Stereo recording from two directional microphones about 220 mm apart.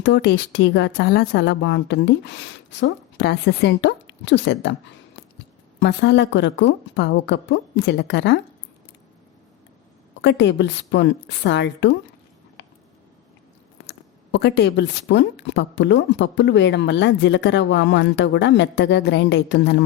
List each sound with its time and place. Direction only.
0.0 s speech: 50° left (ahead or behind)
5.8 s speech: 50° left (ahead or behind)
10.2 s speech: 55° left (ahead or behind)
12.6 s a sound: 55° left (ahead or behind)
14.3 s speech: 50° left (ahead or behind)